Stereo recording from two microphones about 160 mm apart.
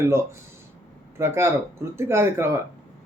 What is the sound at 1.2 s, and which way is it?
Speech, 15° right (ahead or behind).